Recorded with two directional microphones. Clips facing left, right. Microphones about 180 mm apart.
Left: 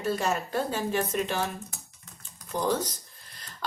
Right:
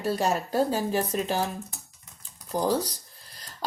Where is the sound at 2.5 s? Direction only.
35° right (ahead or behind).